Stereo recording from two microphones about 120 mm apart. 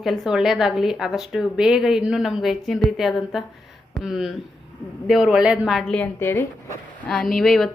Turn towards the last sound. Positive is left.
turn(degrees=5)  # may be behind; listen again after turning